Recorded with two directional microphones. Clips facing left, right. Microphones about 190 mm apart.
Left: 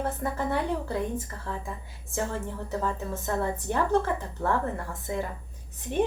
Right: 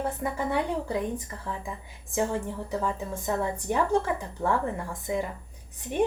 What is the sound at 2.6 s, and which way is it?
Speech, 10° right (ahead or behind).